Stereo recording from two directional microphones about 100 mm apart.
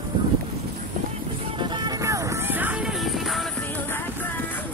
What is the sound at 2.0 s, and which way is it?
Music, 30° right (ahead or behind).